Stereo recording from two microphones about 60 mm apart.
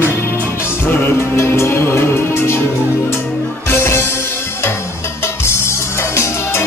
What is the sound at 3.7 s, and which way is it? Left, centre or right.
Music, left.